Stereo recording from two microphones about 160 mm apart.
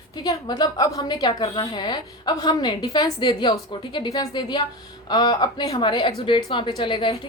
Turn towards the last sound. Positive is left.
turn(degrees=30)  # may be behind; listen again after turning